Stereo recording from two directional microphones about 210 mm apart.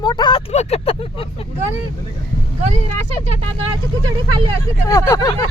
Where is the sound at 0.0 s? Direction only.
20° left (ahead or behind).